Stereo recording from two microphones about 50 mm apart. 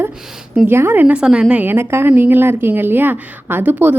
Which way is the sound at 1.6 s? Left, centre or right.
Right.